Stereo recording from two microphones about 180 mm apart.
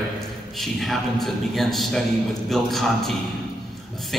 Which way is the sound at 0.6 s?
Centre (ahead or behind).